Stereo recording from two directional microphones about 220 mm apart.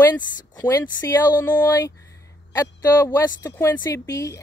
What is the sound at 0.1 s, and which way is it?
Speech, 15° left (ahead or behind).